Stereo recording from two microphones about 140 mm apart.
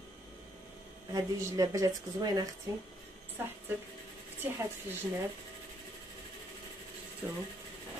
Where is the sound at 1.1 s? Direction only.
25° right (ahead or behind).